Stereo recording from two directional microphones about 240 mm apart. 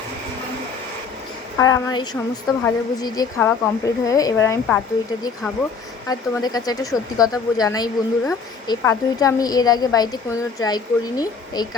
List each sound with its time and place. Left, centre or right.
1.5 s a woman's voice: centre
6.1 s a woman's voice: centre